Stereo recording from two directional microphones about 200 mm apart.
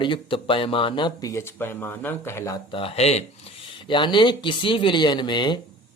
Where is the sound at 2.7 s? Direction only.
30° left (ahead or behind).